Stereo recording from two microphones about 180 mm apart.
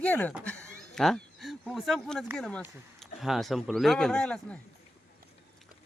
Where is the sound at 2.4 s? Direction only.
5° left (ahead or behind).